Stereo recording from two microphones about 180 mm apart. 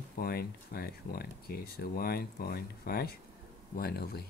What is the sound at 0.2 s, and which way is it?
Speech, 60° left (ahead or behind).